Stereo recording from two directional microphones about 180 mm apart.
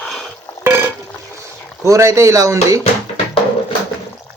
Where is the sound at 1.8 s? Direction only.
15° right (ahead or behind).